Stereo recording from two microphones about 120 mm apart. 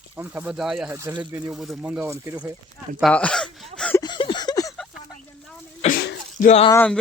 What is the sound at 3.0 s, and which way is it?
Speech, 10° left (ahead or behind).